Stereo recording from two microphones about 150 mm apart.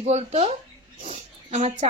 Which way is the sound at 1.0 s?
45° right (ahead or behind).